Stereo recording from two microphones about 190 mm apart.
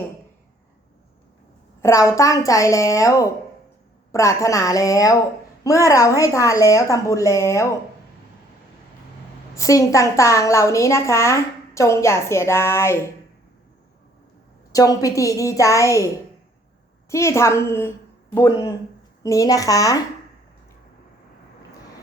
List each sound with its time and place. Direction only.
1.8 s a woman's voice: 15° left (ahead or behind)
9.6 s a woman's voice: 15° left (ahead or behind)
14.7 s a woman's voice: 20° left (ahead or behind)
17.1 s a woman's voice: 15° left (ahead or behind)